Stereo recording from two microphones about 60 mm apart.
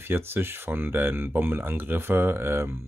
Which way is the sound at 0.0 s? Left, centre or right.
Right.